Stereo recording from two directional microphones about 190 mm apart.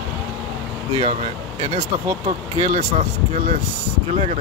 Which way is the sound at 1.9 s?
40° right (ahead or behind).